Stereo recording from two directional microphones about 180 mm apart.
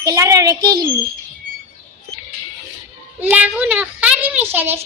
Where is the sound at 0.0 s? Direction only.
20° right (ahead or behind).